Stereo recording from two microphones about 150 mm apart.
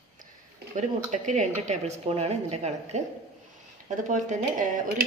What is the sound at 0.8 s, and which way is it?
Speech, 55° right (ahead or behind).